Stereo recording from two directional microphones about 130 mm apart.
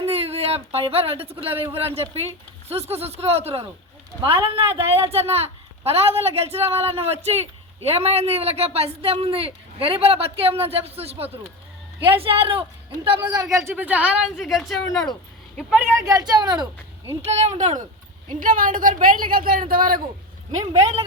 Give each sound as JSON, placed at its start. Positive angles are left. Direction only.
{"t": 0.0, "sound": "speech", "side_deg": -50}
{"t": 13.3, "sound": "speech", "side_deg": -30}
{"t": 13.7, "sound": "speech", "side_deg": -15}
{"t": 16.0, "sound": "speech", "side_deg": -25}
{"t": 17.2, "sound": "speech", "side_deg": -60}
{"t": 18.3, "sound": "speech", "side_deg": -90}